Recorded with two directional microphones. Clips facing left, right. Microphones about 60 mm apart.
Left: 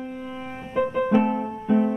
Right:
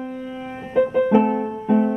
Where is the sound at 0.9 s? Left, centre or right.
Centre.